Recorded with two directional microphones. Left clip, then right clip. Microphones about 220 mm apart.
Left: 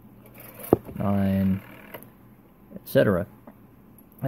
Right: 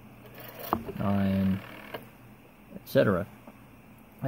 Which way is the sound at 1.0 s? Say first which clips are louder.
Left 3 dB; 15° left (ahead or behind).